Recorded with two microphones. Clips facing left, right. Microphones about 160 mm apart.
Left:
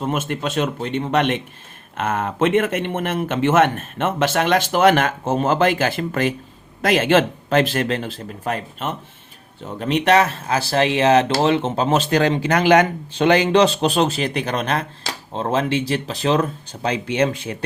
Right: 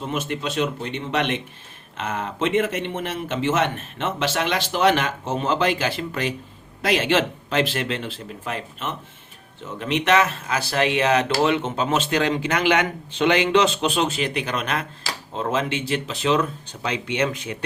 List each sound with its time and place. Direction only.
0.0 s speech: 50° left (ahead or behind); by 17.6 s 30° left (ahead or behind)